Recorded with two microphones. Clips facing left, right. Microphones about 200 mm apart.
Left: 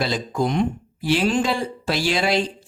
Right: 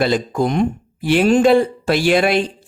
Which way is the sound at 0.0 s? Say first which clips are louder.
Right 6 dB; 55° right (ahead or behind).